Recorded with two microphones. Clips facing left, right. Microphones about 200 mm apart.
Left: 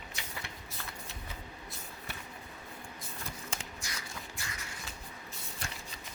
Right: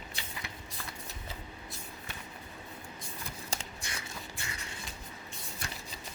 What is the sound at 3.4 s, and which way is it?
Shuffling cards, 30° right (ahead or behind).